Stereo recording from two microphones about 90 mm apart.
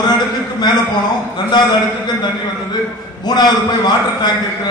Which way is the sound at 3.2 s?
50° left (ahead or behind).